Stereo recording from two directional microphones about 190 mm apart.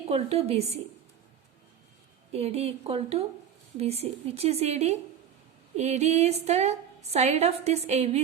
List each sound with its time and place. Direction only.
0.0 s a woman's voice: 35° right (ahead or behind)
2.3 s a woman's voice: 35° right (ahead or behind)